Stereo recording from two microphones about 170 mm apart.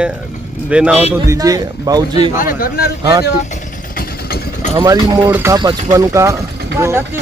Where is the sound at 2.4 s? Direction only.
60° left (ahead or behind).